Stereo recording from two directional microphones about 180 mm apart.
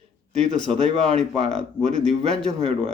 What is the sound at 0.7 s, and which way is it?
Speech, 35° right (ahead or behind).